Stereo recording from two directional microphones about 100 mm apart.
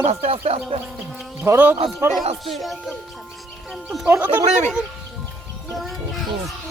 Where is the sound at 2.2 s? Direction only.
90° right.